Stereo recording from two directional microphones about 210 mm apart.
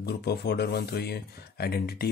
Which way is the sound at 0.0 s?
50° left (ahead or behind).